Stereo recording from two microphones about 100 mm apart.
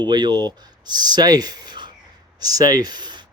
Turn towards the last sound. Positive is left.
turn(degrees=-45)  # may be behind; listen again after turning